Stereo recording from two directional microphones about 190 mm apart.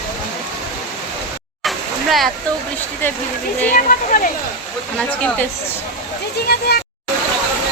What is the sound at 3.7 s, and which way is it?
Speech, 45° left (ahead or behind).